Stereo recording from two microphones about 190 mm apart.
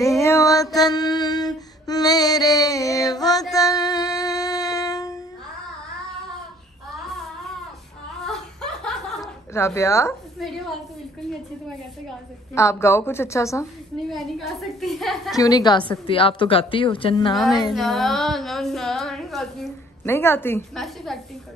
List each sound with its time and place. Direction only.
0.0 s music: 15° left (ahead or behind)
3.5 s female singing: 20° left (ahead or behind)
8.3 s laughter: 5° left (ahead or behind)
9.8 s a woman's voice: 15° left (ahead or behind)
12.5 s a woman's voice: 15° left (ahead or behind)
14.0 s a woman's voice: centre (ahead or behind)
15.3 s a woman's voice: 20° left (ahead or behind)
17.7 s a woman's voice: centre (ahead or behind)
20.1 s a woman's voice: 10° left (ahead or behind)